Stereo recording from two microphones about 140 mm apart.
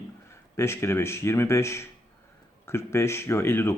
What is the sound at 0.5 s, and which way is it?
Speech, 20° left (ahead or behind).